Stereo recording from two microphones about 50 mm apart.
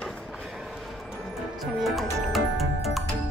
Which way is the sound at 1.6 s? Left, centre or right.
Centre.